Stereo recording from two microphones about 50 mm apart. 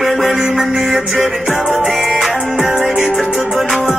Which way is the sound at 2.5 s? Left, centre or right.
Centre.